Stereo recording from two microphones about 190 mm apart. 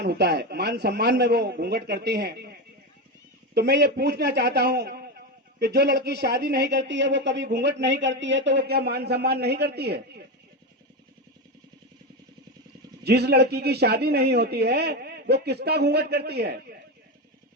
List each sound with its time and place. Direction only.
0.0 s speech: 60° right (ahead or behind)
13.1 s speech: 60° right (ahead or behind)